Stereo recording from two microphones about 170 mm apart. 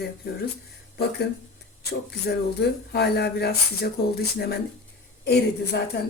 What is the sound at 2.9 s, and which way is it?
Speech, 75° left (ahead or behind).